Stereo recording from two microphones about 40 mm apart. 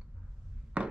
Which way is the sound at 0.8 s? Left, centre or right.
Right.